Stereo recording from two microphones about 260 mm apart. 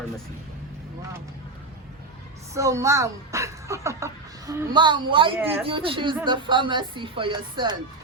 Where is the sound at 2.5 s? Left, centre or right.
Centre.